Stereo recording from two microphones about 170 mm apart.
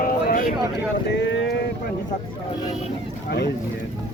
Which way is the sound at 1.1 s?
90° left.